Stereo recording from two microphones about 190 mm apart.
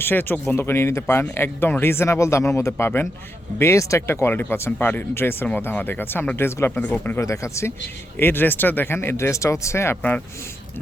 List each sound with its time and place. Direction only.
0.0 s speech: 10° left (ahead or behind)